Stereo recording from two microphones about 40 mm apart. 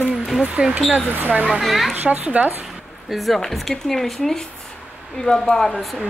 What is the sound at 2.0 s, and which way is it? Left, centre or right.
Speech, right.